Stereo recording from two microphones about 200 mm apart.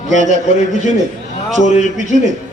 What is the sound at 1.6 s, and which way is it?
Speech, 35° left (ahead or behind).